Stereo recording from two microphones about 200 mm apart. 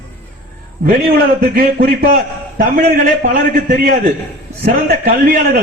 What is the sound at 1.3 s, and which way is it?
Speech, 50° right (ahead or behind).